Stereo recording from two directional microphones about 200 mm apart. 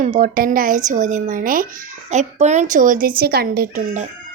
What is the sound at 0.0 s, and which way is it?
A child's voice, 40° right (ahead or behind).